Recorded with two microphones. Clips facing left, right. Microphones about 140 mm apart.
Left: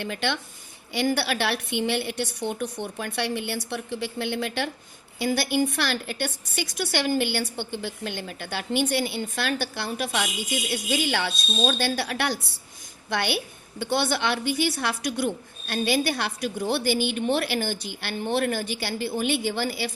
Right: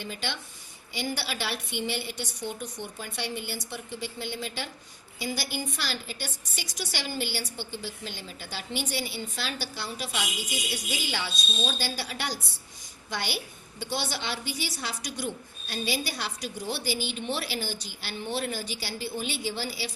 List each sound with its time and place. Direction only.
0.0 s a woman's voice: 65° left (ahead or behind)